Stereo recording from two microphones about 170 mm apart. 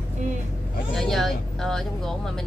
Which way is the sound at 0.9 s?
Centre (ahead or behind).